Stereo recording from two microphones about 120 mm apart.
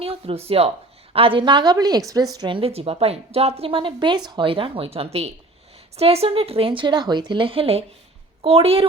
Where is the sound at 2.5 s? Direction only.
50° right (ahead or behind).